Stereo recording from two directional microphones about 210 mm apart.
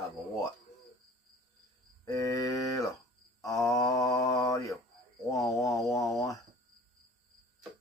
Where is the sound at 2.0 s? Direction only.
15° left (ahead or behind).